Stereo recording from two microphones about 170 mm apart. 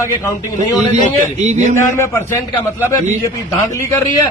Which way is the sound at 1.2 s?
45° right (ahead or behind).